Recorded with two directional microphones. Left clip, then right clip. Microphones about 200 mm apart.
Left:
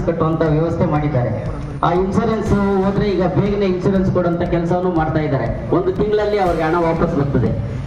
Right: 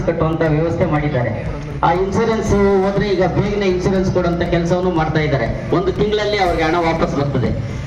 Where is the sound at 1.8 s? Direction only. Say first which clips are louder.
Right 2 dB; 65° left (ahead or behind).